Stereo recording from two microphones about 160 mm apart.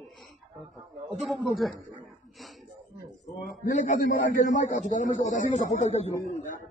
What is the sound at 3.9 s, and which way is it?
A man's voice, 55° left (ahead or behind).